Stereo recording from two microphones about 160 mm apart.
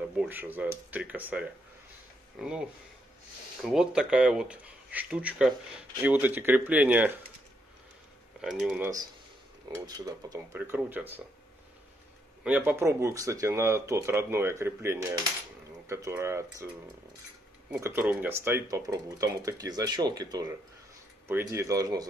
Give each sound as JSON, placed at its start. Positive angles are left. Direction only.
{"t": 0.1, "sound": "speech", "side_deg": -10}
{"t": 8.4, "sound": "speech", "side_deg": -5}
{"t": 9.8, "sound": "speech", "side_deg": -25}
{"t": 12.4, "sound": "speech", "side_deg": -10}